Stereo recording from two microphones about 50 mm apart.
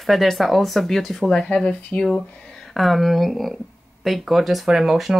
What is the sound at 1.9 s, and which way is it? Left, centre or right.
Speech, left.